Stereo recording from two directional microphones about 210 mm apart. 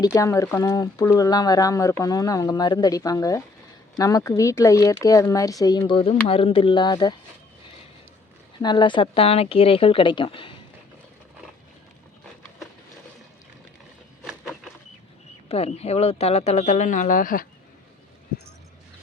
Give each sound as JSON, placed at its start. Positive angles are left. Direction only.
{"t": 0.0, "sound": "speech", "side_deg": 15}
{"t": 8.6, "sound": "speech", "side_deg": 20}
{"t": 14.3, "sound": "a sound", "side_deg": 0}
{"t": 15.4, "sound": "speech", "side_deg": 30}